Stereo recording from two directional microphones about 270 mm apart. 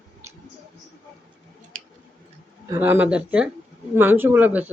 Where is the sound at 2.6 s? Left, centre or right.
Centre.